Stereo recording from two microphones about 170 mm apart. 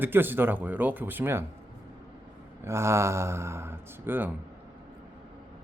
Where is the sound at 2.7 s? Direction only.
15° right (ahead or behind).